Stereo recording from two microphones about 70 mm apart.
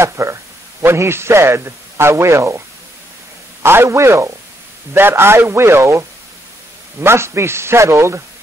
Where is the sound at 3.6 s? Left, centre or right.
Right.